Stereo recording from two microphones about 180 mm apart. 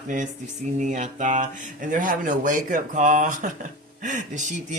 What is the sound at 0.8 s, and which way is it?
Speech, 45° right (ahead or behind).